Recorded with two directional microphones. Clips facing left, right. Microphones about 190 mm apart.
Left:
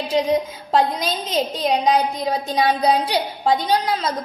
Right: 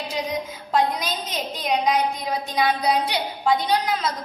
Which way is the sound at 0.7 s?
30° left (ahead or behind).